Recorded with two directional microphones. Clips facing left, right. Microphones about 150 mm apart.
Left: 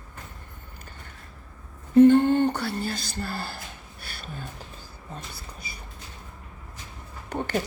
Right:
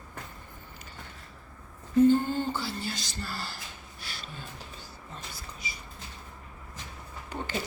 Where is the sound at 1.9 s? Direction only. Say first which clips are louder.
Left 6 dB; 70° left (ahead or behind); by 3.5 s 55° left (ahead or behind).